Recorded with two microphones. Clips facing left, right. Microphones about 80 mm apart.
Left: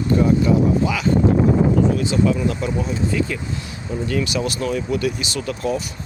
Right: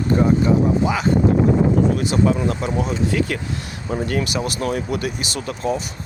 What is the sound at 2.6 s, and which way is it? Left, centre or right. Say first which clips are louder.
Speech: right 1 dB; right.